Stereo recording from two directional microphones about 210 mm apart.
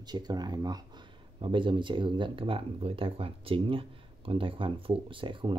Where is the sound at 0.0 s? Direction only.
20° right (ahead or behind).